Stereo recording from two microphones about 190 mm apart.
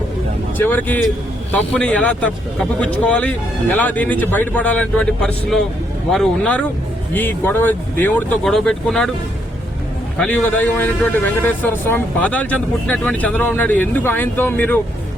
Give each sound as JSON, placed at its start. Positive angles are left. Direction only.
{"t": 0.6, "sound": "a man's voice", "side_deg": 10}
{"t": 10.2, "sound": "a man's voice", "side_deg": 5}